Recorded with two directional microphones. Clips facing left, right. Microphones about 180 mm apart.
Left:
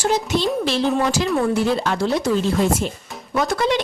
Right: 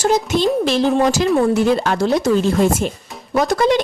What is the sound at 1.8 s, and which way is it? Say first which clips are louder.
Speech: right 4 dB; 50° right (ahead or behind).